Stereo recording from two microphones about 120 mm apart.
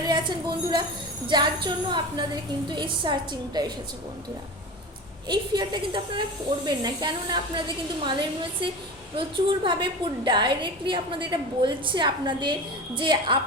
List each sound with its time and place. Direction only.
0.0 s a woman's voice: 40° right (ahead or behind)
5.3 s a woman's voice: 40° right (ahead or behind)
9.1 s a woman's voice: 40° right (ahead or behind)